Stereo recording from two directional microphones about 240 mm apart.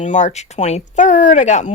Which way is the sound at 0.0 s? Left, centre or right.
Left.